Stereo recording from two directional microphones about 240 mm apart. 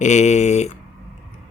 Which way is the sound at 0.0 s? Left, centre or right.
Left.